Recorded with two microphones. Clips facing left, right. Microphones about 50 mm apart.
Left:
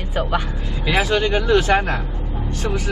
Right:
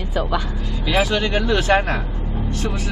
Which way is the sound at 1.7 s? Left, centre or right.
Right.